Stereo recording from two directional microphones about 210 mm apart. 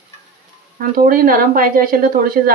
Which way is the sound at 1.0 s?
40° right (ahead or behind).